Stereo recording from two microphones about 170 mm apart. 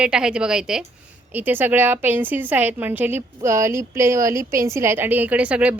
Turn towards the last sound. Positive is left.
turn(degrees=-10)  # may be behind; listen again after turning